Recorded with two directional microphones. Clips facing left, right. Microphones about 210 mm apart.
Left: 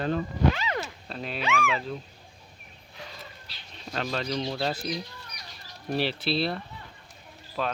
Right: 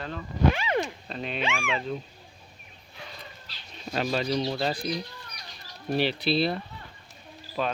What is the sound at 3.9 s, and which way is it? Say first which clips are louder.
Speech: right 3 dB; 10° right (ahead or behind).